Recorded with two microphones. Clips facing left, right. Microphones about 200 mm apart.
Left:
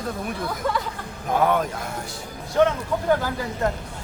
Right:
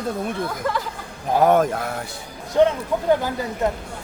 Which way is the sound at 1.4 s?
45° right (ahead or behind).